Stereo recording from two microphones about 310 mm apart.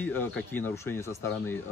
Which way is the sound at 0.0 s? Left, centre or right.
Centre.